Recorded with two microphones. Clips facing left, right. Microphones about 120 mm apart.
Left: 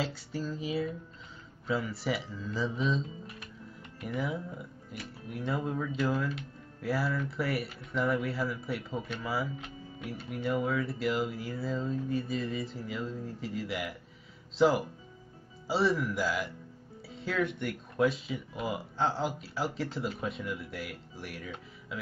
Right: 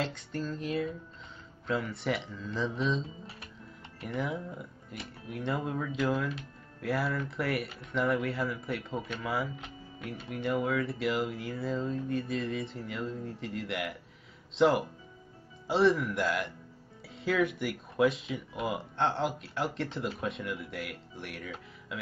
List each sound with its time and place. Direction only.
0.0 s speech: 5° left (ahead or behind)
4.0 s speech: 5° left (ahead or behind)